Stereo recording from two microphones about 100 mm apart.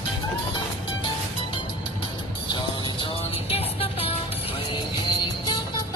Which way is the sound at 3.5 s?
75° left (ahead or behind).